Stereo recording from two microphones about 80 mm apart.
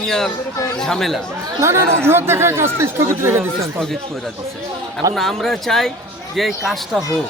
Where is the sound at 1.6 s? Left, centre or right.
Right.